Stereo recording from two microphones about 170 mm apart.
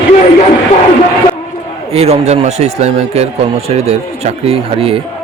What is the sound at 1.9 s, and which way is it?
A man's voice, 35° right (ahead or behind).